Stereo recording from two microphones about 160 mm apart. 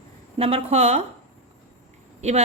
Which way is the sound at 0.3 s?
35° right (ahead or behind).